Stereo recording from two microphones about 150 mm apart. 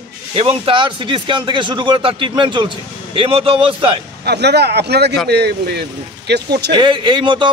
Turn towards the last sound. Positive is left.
turn(degrees=-30)  # may be behind; listen again after turning